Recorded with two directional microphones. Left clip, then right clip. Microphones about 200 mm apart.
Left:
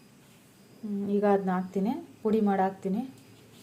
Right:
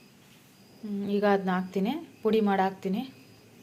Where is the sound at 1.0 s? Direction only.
5° left (ahead or behind).